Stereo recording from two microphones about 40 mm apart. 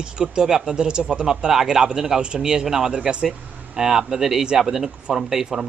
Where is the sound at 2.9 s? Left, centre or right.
Right.